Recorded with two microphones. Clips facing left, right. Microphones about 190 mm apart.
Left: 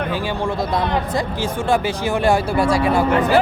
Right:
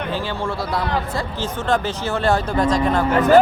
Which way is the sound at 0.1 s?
15° left (ahead or behind).